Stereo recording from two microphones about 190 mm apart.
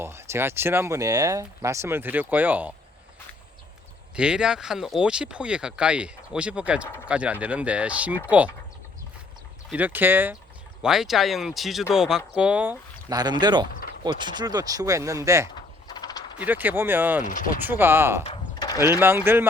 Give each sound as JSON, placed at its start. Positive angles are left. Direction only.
{"t": 0.0, "sound": "speech", "side_deg": -15}
{"t": 4.1, "sound": "speech", "side_deg": -5}
{"t": 9.6, "sound": "speech", "side_deg": -10}
{"t": 13.1, "sound": "speech", "side_deg": -20}
{"t": 15.9, "sound": "a sound", "side_deg": 20}
{"t": 16.4, "sound": "speech", "side_deg": -10}
{"t": 17.2, "sound": "speech", "side_deg": 45}
{"t": 17.7, "sound": "speech", "side_deg": -10}
{"t": 18.2, "sound": "a sound", "side_deg": 30}
{"t": 18.8, "sound": "speech", "side_deg": -10}